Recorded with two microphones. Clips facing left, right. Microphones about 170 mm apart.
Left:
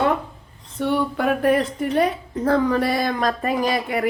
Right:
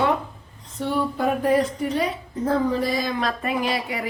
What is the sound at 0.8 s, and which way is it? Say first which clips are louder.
A woman's voice: left 2 dB; 70° left (ahead or behind).